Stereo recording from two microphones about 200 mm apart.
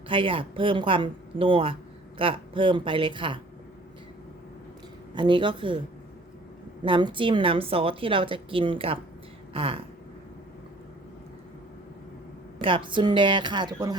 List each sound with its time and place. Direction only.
0.1 s speech: 25° right (ahead or behind)
5.1 s speech: 25° right (ahead or behind)
6.8 s speech: 25° right (ahead or behind)
12.5 s speech: 25° right (ahead or behind)